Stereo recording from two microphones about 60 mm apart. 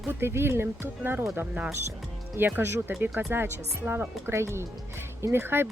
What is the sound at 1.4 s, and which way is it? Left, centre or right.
Speech, right.